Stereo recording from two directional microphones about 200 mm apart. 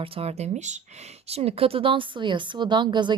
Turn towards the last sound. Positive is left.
turn(degrees=-20)  # may be behind; listen again after turning